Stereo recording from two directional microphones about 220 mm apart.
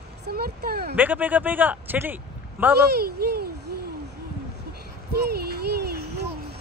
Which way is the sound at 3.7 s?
45° right (ahead or behind).